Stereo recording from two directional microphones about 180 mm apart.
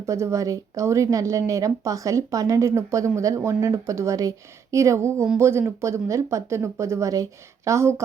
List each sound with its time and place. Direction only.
0.0 s speech: 15° right (ahead or behind)